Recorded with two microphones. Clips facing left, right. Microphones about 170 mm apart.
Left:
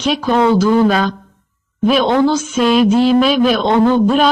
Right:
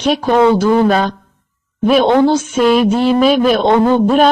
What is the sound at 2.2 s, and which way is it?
Speech, 60° right (ahead or behind).